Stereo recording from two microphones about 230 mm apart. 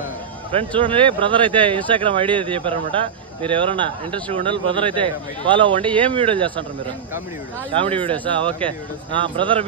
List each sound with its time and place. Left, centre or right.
0.5 s speech: right
7.9 s speech: right
8.5 s speech: centre
9.1 s speech: right